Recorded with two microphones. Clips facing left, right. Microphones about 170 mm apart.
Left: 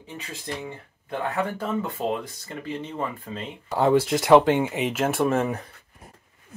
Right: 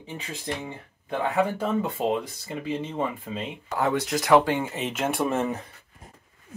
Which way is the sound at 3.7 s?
25° left (ahead or behind).